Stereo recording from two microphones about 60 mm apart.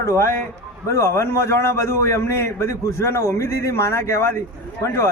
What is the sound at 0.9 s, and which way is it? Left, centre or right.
A man's voice, left.